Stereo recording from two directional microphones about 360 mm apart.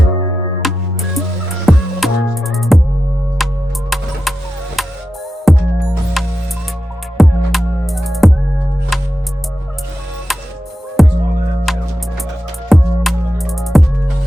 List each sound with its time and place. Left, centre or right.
0.6 s music: centre
10.3 s music: centre